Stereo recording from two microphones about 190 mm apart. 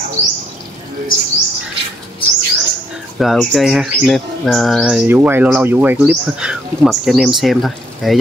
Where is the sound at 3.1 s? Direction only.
Centre (ahead or behind).